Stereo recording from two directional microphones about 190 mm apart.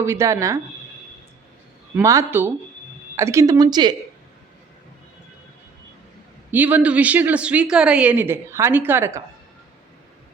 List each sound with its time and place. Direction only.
0.0 s a woman's voice: 15° right (ahead or behind)
2.0 s a woman's voice: 15° right (ahead or behind)
6.5 s a woman's voice: 10° right (ahead or behind)